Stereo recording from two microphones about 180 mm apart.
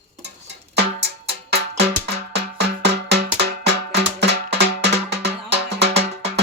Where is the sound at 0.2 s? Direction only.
65° right (ahead or behind).